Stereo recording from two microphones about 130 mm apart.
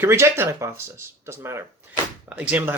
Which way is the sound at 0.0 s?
20° right (ahead or behind).